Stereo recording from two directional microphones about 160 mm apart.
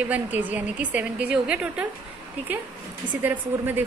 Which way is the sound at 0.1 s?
10° right (ahead or behind).